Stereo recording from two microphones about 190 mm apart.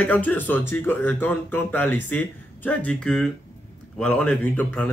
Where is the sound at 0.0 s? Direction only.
10° left (ahead or behind).